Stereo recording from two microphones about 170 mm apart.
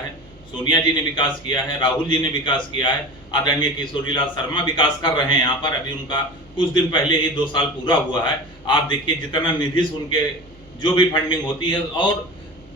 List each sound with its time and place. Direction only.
0.6 s a man's voice: 25° left (ahead or behind)